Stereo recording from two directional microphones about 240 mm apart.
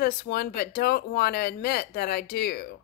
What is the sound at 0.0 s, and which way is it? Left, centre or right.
Speech, left.